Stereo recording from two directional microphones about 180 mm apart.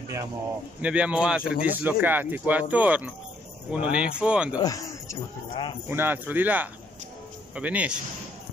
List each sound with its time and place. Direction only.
0.8 s speech: 5° right (ahead or behind)
4.6 s speech: 20° left (ahead or behind)
5.9 s speech: 10° right (ahead or behind)